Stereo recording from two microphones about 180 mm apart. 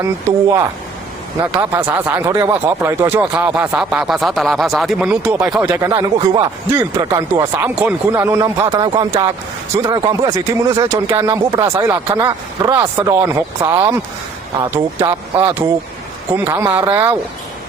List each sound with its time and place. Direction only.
0.0 s speech: 15° right (ahead or behind)